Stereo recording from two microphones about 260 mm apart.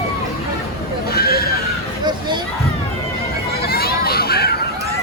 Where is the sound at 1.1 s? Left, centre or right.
Left.